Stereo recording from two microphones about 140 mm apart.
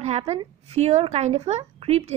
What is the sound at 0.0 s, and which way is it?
A woman's voice, 50° right (ahead or behind).